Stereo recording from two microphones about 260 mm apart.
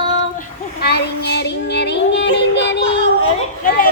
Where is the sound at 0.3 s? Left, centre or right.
Left.